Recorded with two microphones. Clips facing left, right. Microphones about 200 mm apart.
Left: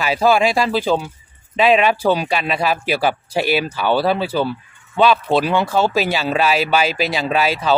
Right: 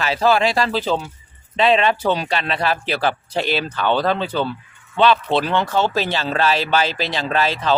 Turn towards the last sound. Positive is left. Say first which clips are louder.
# left 2 dB
turn(degrees=10)  # may be behind; listen again after turning